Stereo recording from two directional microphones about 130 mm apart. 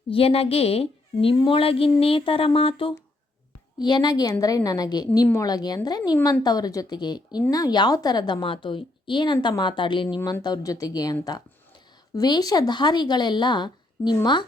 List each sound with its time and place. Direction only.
0.1 s speech: 50° left (ahead or behind)
3.8 s a woman's voice: 35° left (ahead or behind)